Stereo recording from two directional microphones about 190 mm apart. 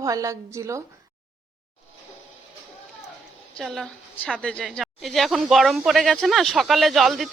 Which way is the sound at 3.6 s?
Centre (ahead or behind).